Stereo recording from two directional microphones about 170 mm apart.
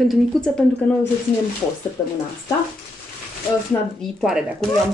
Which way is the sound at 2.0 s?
15° left (ahead or behind).